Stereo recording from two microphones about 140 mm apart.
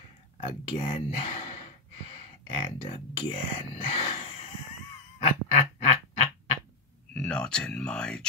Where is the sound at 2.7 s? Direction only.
45° left (ahead or behind).